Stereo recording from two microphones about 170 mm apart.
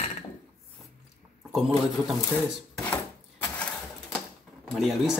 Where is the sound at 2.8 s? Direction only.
10° left (ahead or behind).